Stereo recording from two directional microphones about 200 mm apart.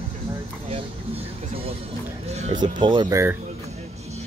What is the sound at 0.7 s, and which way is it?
Speech, 30° right (ahead or behind).